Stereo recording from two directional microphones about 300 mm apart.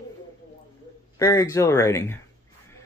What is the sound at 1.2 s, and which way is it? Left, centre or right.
Speech, centre.